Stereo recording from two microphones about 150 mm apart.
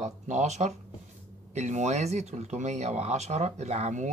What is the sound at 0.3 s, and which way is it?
Speech, 50° right (ahead or behind).